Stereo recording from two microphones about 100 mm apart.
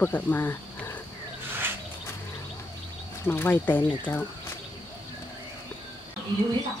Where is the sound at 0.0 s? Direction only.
20° left (ahead or behind).